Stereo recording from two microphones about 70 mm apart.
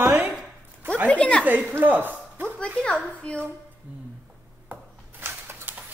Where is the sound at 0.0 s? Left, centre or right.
Right.